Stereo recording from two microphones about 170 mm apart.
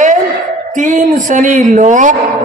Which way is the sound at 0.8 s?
50° right (ahead or behind).